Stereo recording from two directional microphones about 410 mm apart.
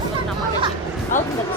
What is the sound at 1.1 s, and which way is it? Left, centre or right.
Speech, centre.